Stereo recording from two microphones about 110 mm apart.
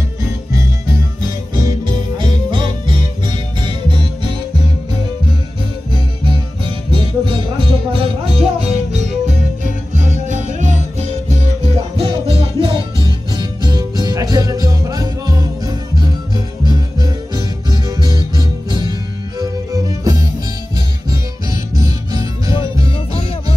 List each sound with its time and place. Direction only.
2.1 s music: 50° right (ahead or behind)
5.9 s music: 50° right (ahead or behind); by 9.4 s 90° right
11.0 s music: 85° right; by 20.2 s 30° right (ahead or behind)
21.7 s music: 35° right (ahead or behind)